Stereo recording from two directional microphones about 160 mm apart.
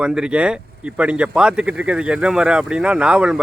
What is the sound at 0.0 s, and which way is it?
A man's voice, 5° right (ahead or behind).